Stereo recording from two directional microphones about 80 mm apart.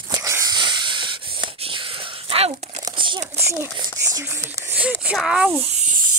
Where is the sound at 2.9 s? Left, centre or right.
Right.